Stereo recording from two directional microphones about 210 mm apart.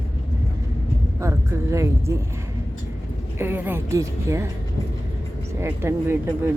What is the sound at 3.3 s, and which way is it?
A woman's voice, 10° right (ahead or behind).